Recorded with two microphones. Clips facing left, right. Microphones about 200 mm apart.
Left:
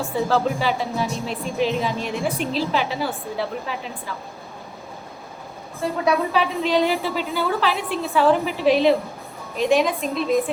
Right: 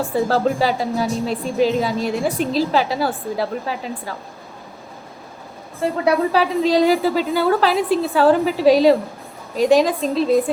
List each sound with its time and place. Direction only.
0.3 s speech: 40° right (ahead or behind)
6.1 s speech: 35° right (ahead or behind)